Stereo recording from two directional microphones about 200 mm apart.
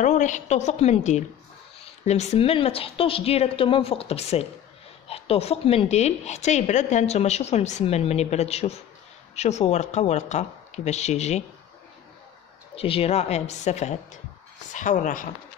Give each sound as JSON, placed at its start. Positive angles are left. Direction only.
{"t": 0.0, "sound": "a woman's voice", "side_deg": 40}
{"t": 12.7, "sound": "a woman's voice", "side_deg": 30}